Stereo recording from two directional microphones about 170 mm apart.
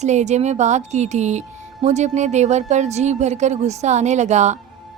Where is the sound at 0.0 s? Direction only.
40° right (ahead or behind).